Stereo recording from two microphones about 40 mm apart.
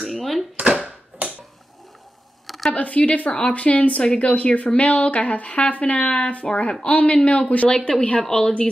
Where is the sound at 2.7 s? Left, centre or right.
Left.